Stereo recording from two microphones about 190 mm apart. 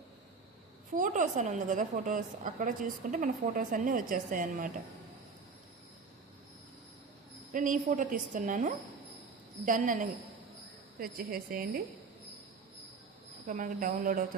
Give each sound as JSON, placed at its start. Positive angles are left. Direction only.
{"t": 0.9, "sound": "a woman's voice", "side_deg": -40}
{"t": 7.5, "sound": "a woman's voice", "side_deg": -45}
{"t": 13.5, "sound": "a woman's voice", "side_deg": -45}